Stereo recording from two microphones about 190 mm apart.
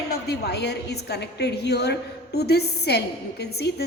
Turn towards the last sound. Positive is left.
turn(degrees=60)  # may be behind; listen again after turning